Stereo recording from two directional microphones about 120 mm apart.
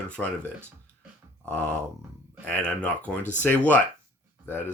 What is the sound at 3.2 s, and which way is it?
Speech, 90° left.